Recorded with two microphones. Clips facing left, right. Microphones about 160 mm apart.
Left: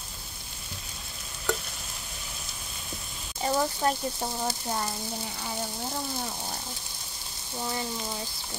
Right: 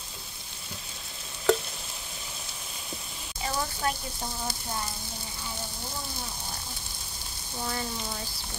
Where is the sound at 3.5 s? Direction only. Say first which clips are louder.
Left 5 dB; 25° left (ahead or behind).